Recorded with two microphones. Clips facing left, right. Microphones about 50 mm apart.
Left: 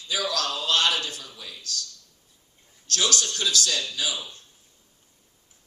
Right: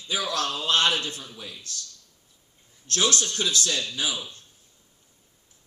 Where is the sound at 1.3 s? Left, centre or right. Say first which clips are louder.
Right 1 dB; centre.